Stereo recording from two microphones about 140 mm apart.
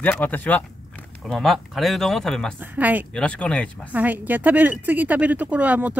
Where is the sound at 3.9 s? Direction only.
10° right (ahead or behind).